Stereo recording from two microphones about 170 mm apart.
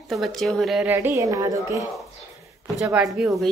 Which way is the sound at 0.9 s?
10° right (ahead or behind).